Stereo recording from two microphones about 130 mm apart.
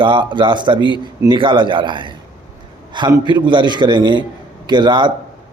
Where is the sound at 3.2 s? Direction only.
35° right (ahead or behind).